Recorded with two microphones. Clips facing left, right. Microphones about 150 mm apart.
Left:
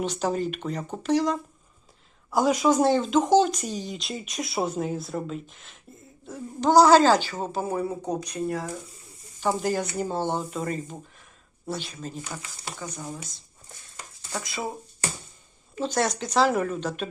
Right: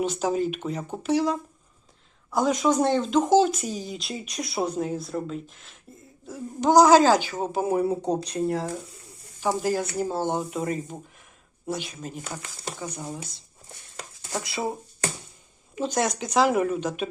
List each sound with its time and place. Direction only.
0.0 s a woman's voice: 10° right (ahead or behind)
2.3 s speech: 5° left (ahead or behind)
6.6 s a woman's voice: 15° right (ahead or behind)
9.4 s a woman's voice: 5° right (ahead or behind)
12.0 s a woman's voice: 15° right (ahead or behind)
14.4 s speech: 30° right (ahead or behind)
15.7 s a woman's voice: 10° right (ahead or behind)